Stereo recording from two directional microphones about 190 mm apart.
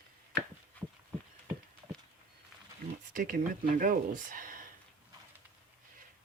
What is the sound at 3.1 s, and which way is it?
Speech, 45° right (ahead or behind).